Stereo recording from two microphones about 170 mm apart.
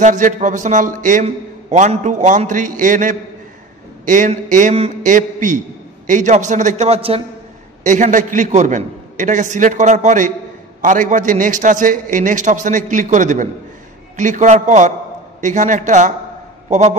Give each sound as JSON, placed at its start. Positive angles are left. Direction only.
{"t": 0.0, "sound": "a man's voice", "side_deg": -45}
{"t": 7.8, "sound": "a man's voice", "side_deg": -45}